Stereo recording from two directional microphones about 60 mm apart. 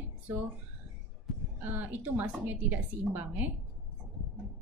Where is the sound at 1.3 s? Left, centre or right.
Centre.